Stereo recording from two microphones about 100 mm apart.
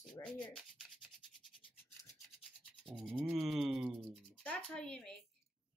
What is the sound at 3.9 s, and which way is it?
Rub, 25° right (ahead or behind).